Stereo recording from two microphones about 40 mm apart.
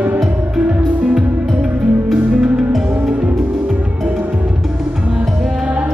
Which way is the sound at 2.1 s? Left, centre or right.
Centre.